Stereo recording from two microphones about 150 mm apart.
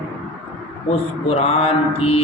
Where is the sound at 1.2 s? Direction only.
40° left (ahead or behind).